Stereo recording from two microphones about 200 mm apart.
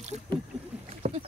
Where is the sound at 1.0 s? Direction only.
30° right (ahead or behind).